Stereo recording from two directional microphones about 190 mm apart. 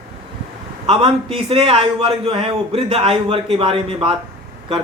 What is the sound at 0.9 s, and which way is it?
A man's voice, 30° right (ahead or behind).